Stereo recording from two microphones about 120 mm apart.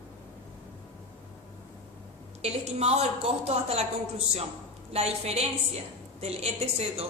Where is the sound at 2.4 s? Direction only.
65° right (ahead or behind).